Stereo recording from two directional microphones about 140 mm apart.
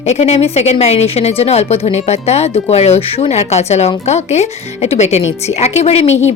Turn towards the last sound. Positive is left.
turn(degrees=50)  # may be behind; listen again after turning